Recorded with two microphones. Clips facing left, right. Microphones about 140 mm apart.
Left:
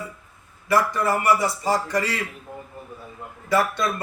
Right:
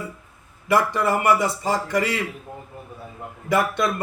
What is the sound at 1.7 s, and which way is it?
Speech, 20° right (ahead or behind).